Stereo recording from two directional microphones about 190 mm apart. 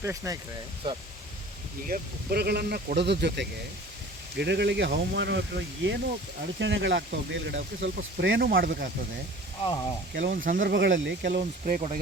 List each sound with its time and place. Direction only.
0.0 s speech: 15° right (ahead or behind)
1.9 s speech: 55° right (ahead or behind); by 8.4 s 75° right (ahead or behind)
8.4 s speech: 50° right (ahead or behind)
10.2 s speech: 45° right (ahead or behind)